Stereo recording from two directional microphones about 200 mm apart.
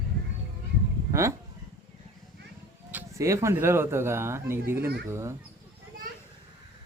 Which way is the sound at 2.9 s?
15° right (ahead or behind).